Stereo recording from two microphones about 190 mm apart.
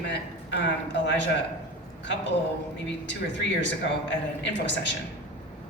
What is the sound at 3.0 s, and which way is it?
Speech, 70° left (ahead or behind).